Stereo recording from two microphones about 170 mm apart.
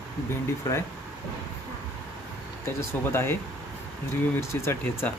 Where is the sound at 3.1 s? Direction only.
15° left (ahead or behind).